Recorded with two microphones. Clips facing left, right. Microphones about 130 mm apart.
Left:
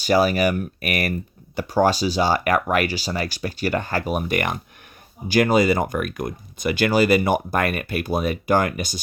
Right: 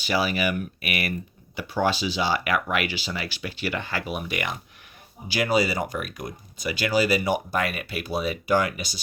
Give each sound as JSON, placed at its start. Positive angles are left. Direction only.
{"t": 0.0, "sound": "speech", "side_deg": 45}